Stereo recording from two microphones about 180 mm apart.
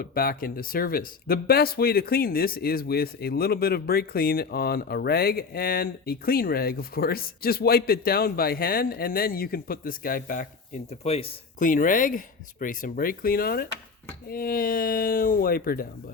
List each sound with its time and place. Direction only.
0.0 s speech: 55° left (ahead or behind)
10.8 s speech: 35° left (ahead or behind)
11.6 s speech: 50° left (ahead or behind)